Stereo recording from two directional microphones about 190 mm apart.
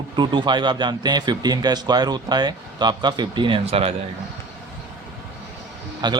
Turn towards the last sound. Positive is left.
turn(degrees=-25)  # may be behind; listen again after turning